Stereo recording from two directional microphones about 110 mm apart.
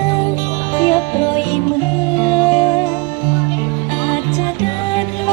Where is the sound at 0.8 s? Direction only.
55° left (ahead or behind); by 2.8 s 40° left (ahead or behind).